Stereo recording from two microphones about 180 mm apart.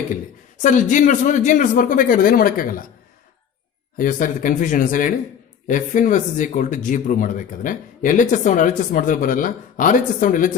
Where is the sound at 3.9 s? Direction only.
45° left (ahead or behind).